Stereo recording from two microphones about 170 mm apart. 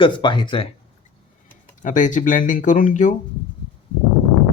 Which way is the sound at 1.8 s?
50° left (ahead or behind).